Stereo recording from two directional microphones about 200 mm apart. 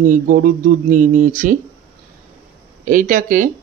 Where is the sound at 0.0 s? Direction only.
45° right (ahead or behind).